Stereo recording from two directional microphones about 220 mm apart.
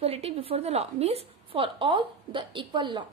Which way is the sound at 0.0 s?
25° right (ahead or behind).